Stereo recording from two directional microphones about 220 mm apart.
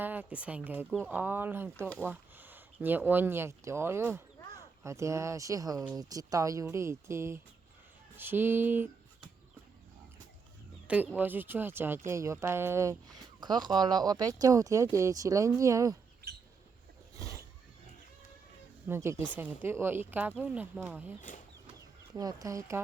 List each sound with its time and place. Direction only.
0.0 s speech: 10° right (ahead or behind)
10.8 s speech: 5° right (ahead or behind)
18.9 s speech: 10° right (ahead or behind)
21.2 s speech: 35° left (ahead or behind)
22.1 s speech: 15° right (ahead or behind)